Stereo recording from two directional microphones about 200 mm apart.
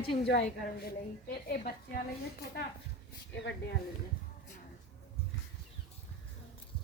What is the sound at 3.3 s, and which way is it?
Speech, 65° left (ahead or behind).